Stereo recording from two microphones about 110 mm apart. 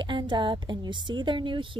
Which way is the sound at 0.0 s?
45° right (ahead or behind).